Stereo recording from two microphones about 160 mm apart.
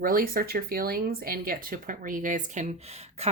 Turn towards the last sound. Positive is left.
turn(degrees=-40)  # may be behind; listen again after turning